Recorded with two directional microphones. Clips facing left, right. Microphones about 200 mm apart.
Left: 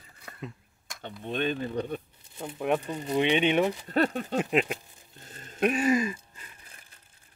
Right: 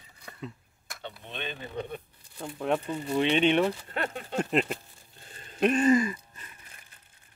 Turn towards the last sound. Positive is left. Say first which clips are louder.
# right 2 dB
turn(degrees=10)  # may be behind; listen again after turning